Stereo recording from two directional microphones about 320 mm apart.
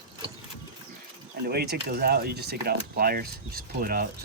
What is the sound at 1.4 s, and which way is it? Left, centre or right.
Speech, right.